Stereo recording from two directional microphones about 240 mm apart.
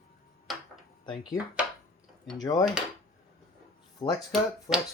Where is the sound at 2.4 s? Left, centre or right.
Centre.